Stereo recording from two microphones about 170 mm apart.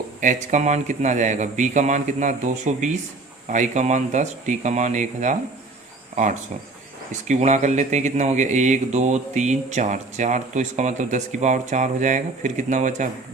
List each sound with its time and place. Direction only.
0.2 s a man's voice: 45° right (ahead or behind)
7.1 s a man's voice: 45° right (ahead or behind)